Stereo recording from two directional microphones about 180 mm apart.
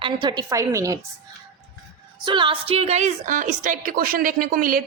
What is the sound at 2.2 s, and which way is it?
A woman's voice, 25° right (ahead or behind).